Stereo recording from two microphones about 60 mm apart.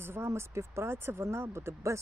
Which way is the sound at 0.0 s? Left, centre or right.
Right.